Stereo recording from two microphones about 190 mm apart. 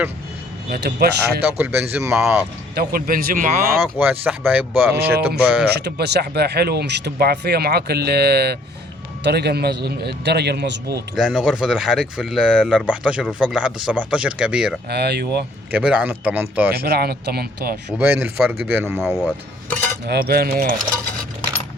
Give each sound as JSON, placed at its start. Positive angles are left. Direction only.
{"t": 0.7, "sound": "speech", "side_deg": -55}
{"t": 1.5, "sound": "speech", "side_deg": -10}
{"t": 2.1, "sound": "speech", "side_deg": 0}
{"t": 2.7, "sound": "speech", "side_deg": -50}
{"t": 3.9, "sound": "speech", "side_deg": -10}
{"t": 5.8, "sound": "speech", "side_deg": -60}
{"t": 11.1, "sound": "speech", "side_deg": 0}
{"t": 14.8, "sound": "speech", "side_deg": -60}
{"t": 15.7, "sound": "speech", "side_deg": -5}
{"t": 16.7, "sound": "speech", "side_deg": -55}
{"t": 18.0, "sound": "speech", "side_deg": -10}
{"t": 19.0, "sound": "speech", "side_deg": 0}
{"t": 20.1, "sound": "speech", "side_deg": -55}